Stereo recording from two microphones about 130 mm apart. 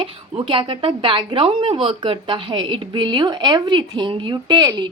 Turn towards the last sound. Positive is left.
turn(degrees=-35)  # may be behind; listen again after turning